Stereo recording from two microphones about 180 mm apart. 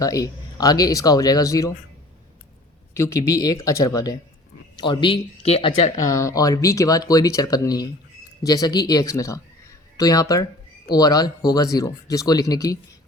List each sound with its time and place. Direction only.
0.0 s speech: 20° left (ahead or behind)
2.9 s speech: 15° left (ahead or behind); by 5.7 s 35° left (ahead or behind)
5.7 s speech: 20° left (ahead or behind)